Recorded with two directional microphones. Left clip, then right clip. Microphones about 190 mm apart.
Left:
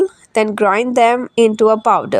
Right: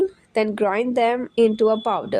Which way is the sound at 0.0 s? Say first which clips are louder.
Left 6 dB; 20° left (ahead or behind).